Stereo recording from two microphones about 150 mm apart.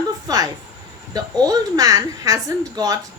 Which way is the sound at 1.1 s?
25° right (ahead or behind).